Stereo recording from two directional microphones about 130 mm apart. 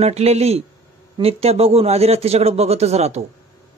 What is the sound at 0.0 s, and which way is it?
Speech, 55° right (ahead or behind).